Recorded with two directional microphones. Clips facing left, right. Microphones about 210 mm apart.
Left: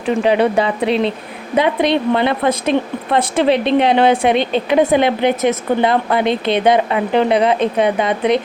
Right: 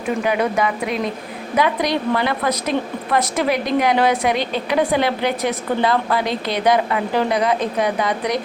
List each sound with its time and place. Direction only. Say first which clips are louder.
0.2 s a woman's voice: left 6 dB; 30° left (ahead or behind)